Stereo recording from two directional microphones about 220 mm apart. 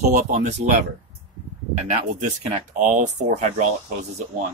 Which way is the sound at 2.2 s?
35° right (ahead or behind).